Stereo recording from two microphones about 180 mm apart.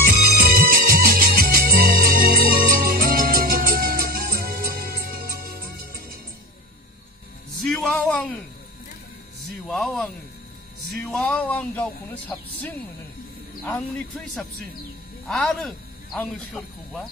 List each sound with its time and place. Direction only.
0.4 s music: 55° right (ahead or behind)
7.6 s music: 5° left (ahead or behind)
9.7 s a sound: centre (ahead or behind)
10.9 s music: 5° left (ahead or behind)
13.7 s speech: 5° left (ahead or behind)